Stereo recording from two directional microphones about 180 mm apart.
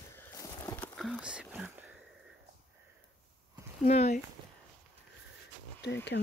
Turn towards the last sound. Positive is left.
turn(degrees=75)  # may be behind; listen again after turning